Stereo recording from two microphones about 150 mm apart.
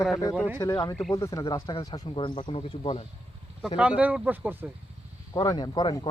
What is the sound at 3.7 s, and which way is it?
Speech, 10° right (ahead or behind).